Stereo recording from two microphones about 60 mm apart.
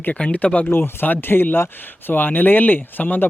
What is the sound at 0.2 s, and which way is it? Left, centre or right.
Speech, centre.